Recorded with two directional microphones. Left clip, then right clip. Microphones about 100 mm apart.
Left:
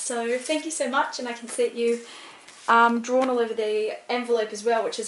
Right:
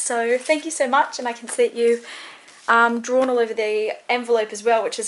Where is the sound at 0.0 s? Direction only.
35° right (ahead or behind).